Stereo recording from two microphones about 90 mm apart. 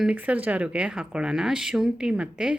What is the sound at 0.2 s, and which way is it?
Speech, 15° right (ahead or behind).